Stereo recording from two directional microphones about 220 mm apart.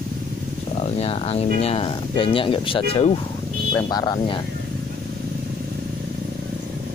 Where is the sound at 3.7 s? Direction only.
15° left (ahead or behind).